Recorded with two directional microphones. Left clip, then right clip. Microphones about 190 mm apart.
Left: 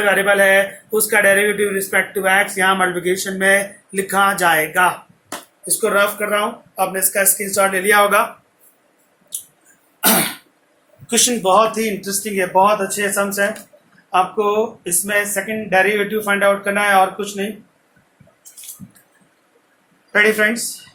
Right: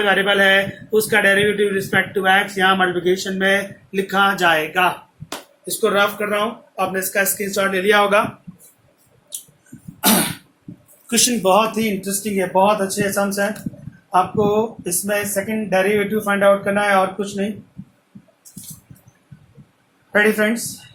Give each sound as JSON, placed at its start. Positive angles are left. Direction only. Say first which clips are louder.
{"t": 0.0, "sound": "speech", "louder": "left 1 dB", "side_deg": -15}
{"t": 9.3, "sound": "a sound", "louder": "left 2 dB", "side_deg": -40}
{"t": 10.0, "sound": "cough", "louder": "left 1 dB", "side_deg": -40}
{"t": 11.1, "sound": "a man's voice", "louder": "left 1 dB", "side_deg": -50}
{"t": 13.0, "sound": "a man's voice", "louder": "left 2 dB", "side_deg": -40}
{"t": 15.0, "sound": "a man's voice", "louder": "left 2 dB", "side_deg": -45}
{"t": 20.1, "sound": "speech", "louder": "left 2 dB", "side_deg": -35}